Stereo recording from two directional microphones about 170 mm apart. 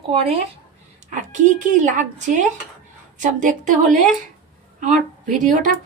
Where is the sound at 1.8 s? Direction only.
45° right (ahead or behind).